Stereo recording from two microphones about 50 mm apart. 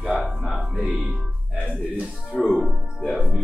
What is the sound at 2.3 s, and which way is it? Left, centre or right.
Music, centre.